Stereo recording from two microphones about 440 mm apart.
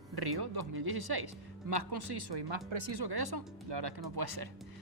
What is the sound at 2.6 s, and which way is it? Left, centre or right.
Speech, right.